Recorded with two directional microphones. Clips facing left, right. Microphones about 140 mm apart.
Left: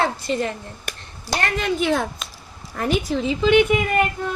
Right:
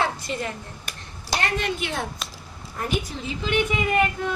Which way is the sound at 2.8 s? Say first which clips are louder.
Left 7 dB; 90° left.